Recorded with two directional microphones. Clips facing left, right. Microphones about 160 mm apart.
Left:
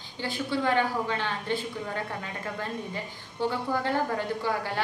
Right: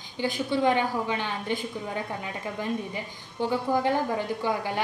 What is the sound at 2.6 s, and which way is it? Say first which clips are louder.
A woman's voice: right 6 dB; 15° right (ahead or behind).